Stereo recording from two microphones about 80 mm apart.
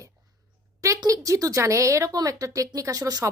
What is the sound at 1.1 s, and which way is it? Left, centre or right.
A woman's voice, right.